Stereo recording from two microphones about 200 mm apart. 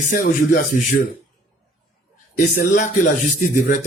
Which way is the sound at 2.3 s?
45° left (ahead or behind).